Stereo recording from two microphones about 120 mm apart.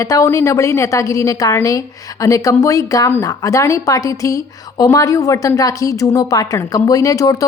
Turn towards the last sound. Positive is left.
turn(degrees=30)  # may be behind; listen again after turning